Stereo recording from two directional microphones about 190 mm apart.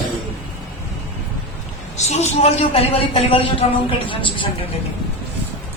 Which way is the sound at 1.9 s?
35° left (ahead or behind).